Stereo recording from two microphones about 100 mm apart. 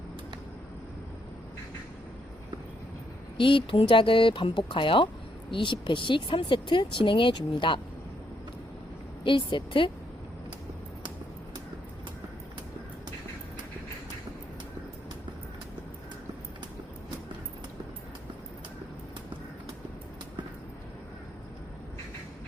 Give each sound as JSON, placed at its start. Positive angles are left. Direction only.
{"t": 3.3, "sound": "speech", "side_deg": 55}
{"t": 9.2, "sound": "speech", "side_deg": 55}